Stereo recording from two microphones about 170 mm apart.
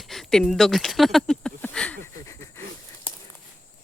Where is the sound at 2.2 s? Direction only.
15° left (ahead or behind).